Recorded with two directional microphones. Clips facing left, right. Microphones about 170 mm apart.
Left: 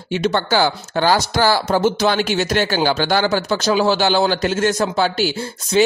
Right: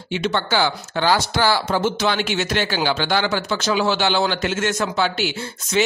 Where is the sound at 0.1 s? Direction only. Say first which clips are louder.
Left 4 dB; 40° left (ahead or behind).